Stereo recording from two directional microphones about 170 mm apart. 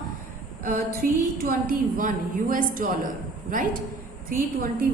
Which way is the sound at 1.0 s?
60° right (ahead or behind).